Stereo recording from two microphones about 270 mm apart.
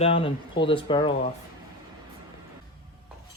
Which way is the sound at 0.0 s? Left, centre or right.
Left.